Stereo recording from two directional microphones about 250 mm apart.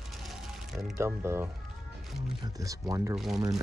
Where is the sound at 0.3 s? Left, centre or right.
Centre.